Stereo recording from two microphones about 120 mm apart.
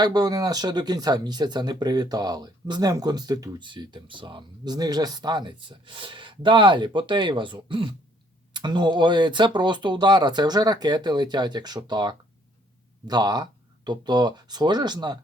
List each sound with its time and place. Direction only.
0.0 s speech: 30° right (ahead or behind)